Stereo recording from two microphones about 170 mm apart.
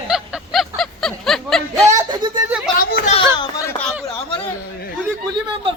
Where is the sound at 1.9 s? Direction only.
25° right (ahead or behind).